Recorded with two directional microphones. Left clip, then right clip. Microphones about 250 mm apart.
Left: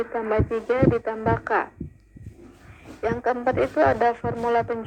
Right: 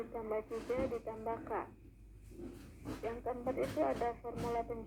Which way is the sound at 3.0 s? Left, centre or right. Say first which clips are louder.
Left 17 dB; left.